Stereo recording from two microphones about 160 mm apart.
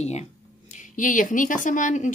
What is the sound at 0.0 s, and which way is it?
Speech, 45° left (ahead or behind).